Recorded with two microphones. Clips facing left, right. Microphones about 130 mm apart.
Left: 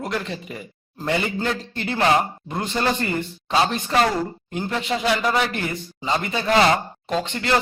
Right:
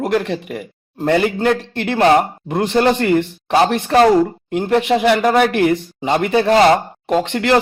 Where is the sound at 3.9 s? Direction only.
40° right (ahead or behind).